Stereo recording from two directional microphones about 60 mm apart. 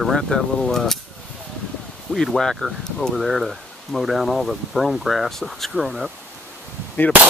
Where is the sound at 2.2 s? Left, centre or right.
Centre.